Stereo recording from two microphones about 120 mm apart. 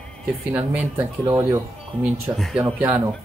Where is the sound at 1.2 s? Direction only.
25° right (ahead or behind).